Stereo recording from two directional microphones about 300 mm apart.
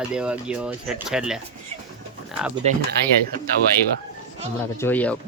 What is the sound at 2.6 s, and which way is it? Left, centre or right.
Speech, right.